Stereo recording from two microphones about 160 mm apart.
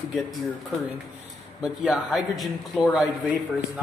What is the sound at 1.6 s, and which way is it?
Speech, 5° right (ahead or behind).